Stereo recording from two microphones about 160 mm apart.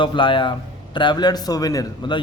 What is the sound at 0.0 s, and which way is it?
A man's voice, 30° left (ahead or behind).